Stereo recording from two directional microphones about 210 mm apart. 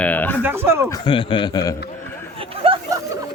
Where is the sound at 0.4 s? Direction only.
10° right (ahead or behind).